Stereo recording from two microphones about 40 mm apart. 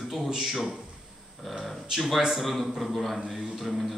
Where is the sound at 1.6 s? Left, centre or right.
Centre.